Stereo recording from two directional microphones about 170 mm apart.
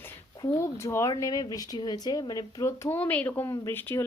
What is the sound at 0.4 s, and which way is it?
A woman's voice, 15° left (ahead or behind).